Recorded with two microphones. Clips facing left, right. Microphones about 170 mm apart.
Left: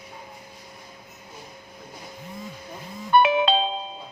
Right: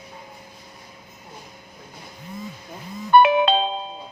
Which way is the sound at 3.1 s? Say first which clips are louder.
Right 3 dB; 55° right (ahead or behind).